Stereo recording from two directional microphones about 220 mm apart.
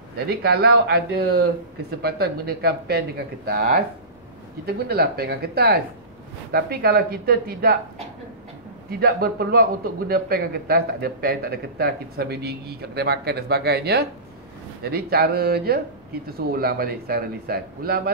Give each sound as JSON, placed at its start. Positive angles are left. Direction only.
{"t": 0.3, "sound": "a man's voice", "side_deg": -45}
{"t": 9.0, "sound": "a man's voice", "side_deg": -45}